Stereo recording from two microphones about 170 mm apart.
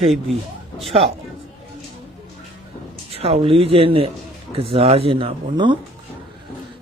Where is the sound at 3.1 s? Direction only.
35° right (ahead or behind).